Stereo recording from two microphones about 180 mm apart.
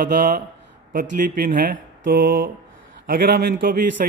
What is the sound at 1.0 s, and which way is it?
A man's voice, 60° right (ahead or behind).